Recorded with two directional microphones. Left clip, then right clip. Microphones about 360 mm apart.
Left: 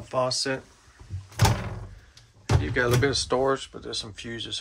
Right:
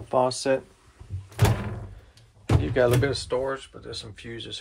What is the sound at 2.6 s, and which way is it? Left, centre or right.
Speech, centre.